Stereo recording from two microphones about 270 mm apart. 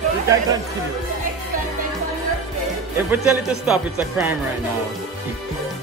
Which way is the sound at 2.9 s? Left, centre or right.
Centre.